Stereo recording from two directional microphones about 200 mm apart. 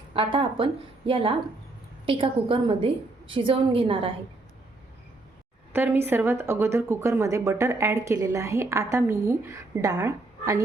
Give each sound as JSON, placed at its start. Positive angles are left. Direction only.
{"t": 0.1, "sound": "a woman's voice", "side_deg": -25}
{"t": 5.7, "sound": "speech", "side_deg": -10}